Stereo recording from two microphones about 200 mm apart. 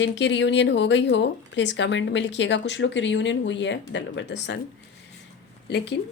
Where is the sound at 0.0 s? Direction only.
65° left (ahead or behind).